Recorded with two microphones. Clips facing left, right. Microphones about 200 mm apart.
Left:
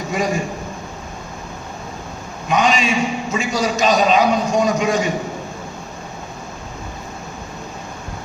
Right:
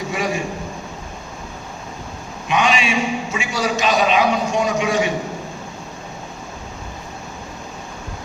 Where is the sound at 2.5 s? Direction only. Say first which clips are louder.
Left 2 dB; 40° left (ahead or behind).